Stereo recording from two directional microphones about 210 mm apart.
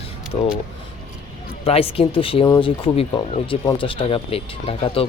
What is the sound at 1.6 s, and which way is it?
Speech, 25° left (ahead or behind).